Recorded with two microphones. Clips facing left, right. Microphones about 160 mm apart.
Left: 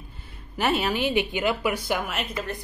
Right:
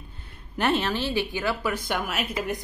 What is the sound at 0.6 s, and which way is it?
A woman's voice, 5° left (ahead or behind).